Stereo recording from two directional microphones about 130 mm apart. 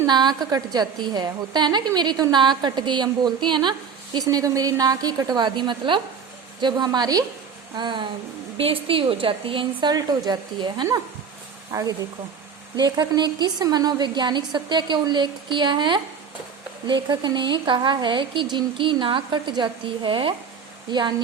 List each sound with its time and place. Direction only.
0.0 s a woman's voice: 35° right (ahead or behind)